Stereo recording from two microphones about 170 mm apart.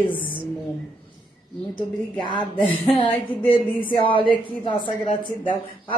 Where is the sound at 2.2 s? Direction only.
30° left (ahead or behind).